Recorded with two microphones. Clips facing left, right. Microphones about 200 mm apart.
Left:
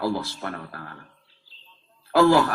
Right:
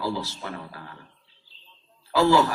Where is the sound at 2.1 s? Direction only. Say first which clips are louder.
Left 2 dB; 55° left (ahead or behind).